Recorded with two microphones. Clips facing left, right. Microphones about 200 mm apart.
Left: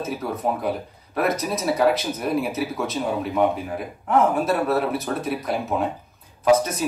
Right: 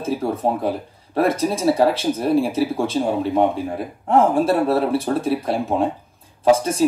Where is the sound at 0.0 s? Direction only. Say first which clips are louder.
Right 4 dB; 30° right (ahead or behind).